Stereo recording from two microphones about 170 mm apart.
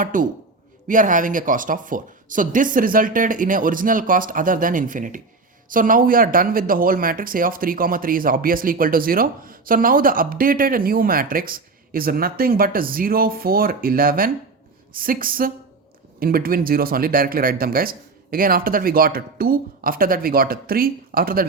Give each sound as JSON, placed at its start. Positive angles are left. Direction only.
{"t": 0.0, "sound": "speech", "side_deg": -50}